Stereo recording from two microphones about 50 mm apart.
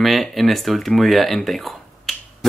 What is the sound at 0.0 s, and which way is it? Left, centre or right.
Speech, centre.